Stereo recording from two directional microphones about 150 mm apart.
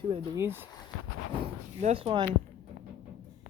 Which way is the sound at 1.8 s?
45° right (ahead or behind).